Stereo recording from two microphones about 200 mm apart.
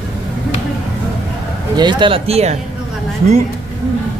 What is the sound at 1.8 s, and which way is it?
Speech, 25° right (ahead or behind).